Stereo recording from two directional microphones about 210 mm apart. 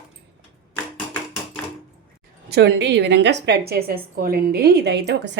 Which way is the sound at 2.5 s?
55° right (ahead or behind).